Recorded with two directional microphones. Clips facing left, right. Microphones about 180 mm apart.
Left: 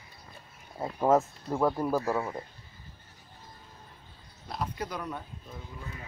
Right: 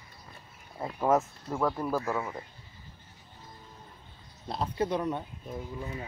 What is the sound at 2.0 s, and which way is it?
Speech, 30° left (ahead or behind).